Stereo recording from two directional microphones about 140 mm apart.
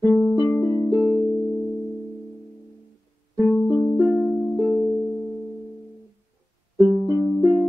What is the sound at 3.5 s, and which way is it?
Music, 10° left (ahead or behind).